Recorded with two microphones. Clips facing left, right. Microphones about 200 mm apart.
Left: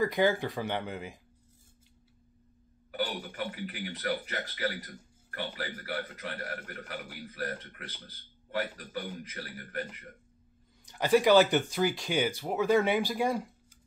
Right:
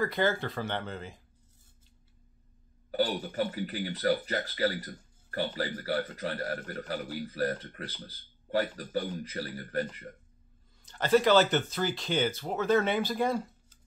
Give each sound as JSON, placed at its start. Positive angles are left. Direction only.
{"t": 0.0, "sound": "speech", "side_deg": 15}
{"t": 2.9, "sound": "speech", "side_deg": -35}
{"t": 10.9, "sound": "speech", "side_deg": 15}